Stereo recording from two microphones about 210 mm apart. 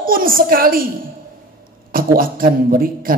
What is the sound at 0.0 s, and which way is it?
Speech, 40° right (ahead or behind).